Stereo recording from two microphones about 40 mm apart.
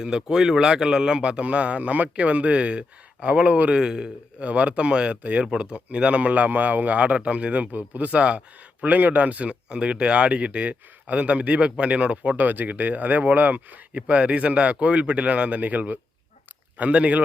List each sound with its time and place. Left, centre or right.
0.0 s speech: centre; by 3.8 s right
3.8 s speech: centre
4.4 s speech: right
8.8 s speech: right
12.4 s speech: right